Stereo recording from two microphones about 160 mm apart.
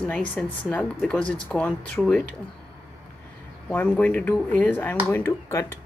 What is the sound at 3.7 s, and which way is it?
Speech, 10° left (ahead or behind).